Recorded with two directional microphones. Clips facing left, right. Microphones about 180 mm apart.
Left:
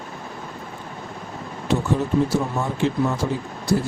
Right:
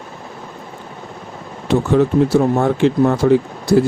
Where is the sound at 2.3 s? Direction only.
65° right (ahead or behind).